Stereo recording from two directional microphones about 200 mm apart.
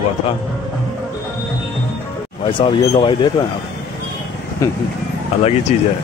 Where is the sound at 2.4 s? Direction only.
25° left (ahead or behind).